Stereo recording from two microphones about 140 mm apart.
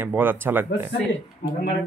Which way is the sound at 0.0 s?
15° right (ahead or behind).